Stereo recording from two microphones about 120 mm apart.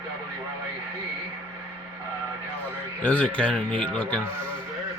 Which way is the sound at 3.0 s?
15° left (ahead or behind).